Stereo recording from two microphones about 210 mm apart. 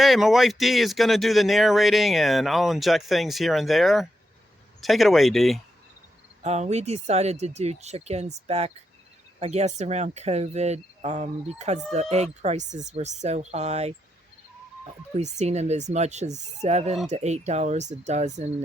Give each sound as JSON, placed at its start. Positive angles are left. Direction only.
{"t": 0.0, "sound": "speech", "side_deg": 0}
{"t": 6.4, "sound": "speech", "side_deg": -30}
{"t": 15.2, "sound": "speech", "side_deg": -30}